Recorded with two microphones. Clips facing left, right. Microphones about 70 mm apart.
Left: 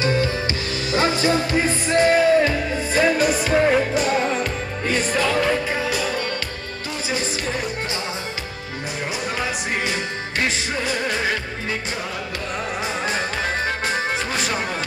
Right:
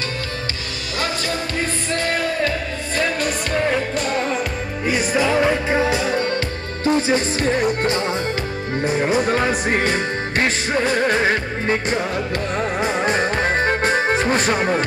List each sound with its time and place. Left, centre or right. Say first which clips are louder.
0.9 s music: left 5 dB; left
3.0 s music: left 4 dB; centre
4.9 s music: right 2 dB; centre
9.0 s music: right 6 dB; right
12.8 s music: right 6 dB; right